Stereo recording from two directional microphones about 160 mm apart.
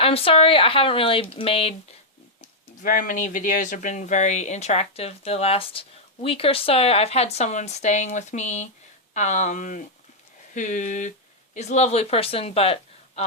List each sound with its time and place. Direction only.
0.0 s speech: 35° left (ahead or behind)
2.8 s speech: 55° left (ahead or behind); by 13.2 s 40° left (ahead or behind)